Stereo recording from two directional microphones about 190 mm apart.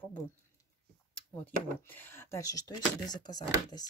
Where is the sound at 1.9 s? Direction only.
10° left (ahead or behind).